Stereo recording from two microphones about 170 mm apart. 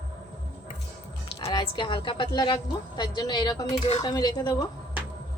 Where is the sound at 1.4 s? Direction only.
25° left (ahead or behind).